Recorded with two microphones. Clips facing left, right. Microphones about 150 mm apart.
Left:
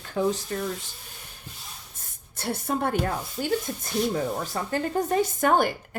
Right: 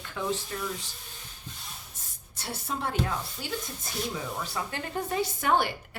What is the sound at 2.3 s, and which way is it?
Speech, 55° left (ahead or behind).